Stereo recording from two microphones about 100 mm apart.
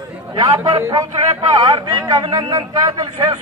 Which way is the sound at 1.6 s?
50° right (ahead or behind).